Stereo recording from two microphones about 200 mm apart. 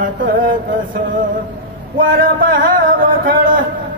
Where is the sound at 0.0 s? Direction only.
40° right (ahead or behind).